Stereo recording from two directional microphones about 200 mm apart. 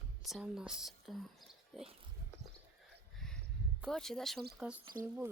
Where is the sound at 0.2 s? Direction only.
Centre (ahead or behind).